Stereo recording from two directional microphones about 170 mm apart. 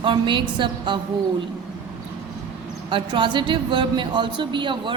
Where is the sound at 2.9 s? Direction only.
30° right (ahead or behind).